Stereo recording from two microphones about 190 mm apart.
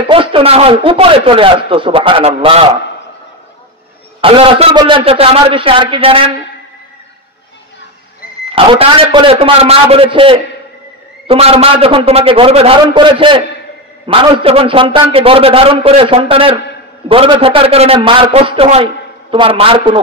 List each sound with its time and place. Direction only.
0.0 s a man's voice: 25° right (ahead or behind)
4.2 s a man's voice: 30° right (ahead or behind)
8.5 s a man's voice: 30° right (ahead or behind)